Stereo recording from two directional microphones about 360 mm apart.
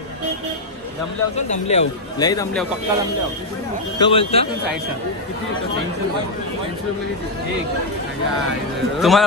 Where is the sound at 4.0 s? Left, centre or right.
Centre.